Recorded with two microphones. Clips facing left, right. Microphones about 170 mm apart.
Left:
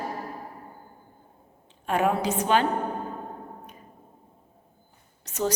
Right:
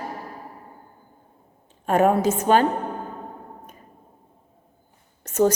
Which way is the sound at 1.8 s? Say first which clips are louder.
Right 6 dB; 45° right (ahead or behind).